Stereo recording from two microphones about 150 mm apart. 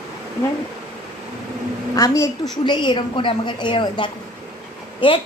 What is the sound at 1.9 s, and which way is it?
A woman's voice, 20° left (ahead or behind).